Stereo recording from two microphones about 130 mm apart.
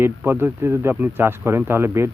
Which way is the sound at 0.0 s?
15° right (ahead or behind).